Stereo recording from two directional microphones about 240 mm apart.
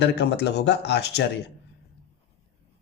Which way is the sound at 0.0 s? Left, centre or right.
Left.